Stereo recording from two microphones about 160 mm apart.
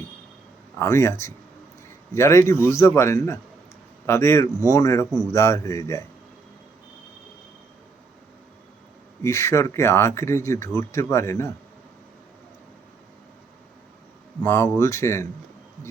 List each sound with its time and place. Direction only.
0.8 s a man's voice: 20° left (ahead or behind)
9.2 s speech: 15° left (ahead or behind)
14.4 s speech: 15° left (ahead or behind)